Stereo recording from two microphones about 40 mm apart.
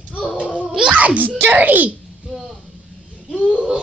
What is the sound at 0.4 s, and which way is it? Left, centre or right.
Babbling, right.